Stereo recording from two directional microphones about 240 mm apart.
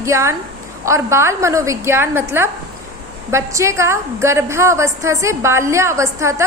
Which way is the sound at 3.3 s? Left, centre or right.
Centre.